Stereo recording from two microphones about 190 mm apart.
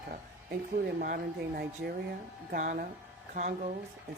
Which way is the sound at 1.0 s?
50° right (ahead or behind).